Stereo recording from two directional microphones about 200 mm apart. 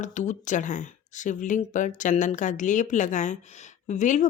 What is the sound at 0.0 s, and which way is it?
Speech, 35° left (ahead or behind).